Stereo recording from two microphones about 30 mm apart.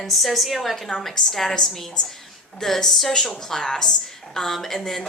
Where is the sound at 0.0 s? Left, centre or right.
Centre.